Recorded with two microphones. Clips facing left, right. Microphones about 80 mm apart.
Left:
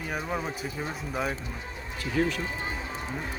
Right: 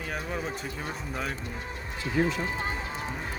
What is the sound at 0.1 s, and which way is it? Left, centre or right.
Speech, centre.